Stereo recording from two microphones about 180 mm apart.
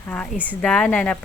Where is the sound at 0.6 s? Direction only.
5° left (ahead or behind).